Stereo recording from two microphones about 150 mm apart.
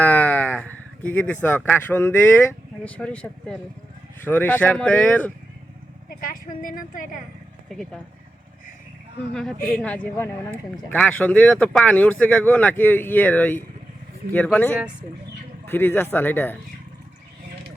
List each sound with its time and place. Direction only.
0.0 s speech: 10° left (ahead or behind)
6.1 s a woman's voice: 75° left (ahead or behind)
7.7 s speech: centre (ahead or behind)
9.3 s speech: 5° left (ahead or behind)